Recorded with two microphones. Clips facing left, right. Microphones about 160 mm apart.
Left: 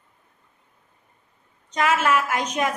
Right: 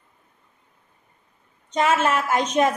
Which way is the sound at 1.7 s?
30° right (ahead or behind).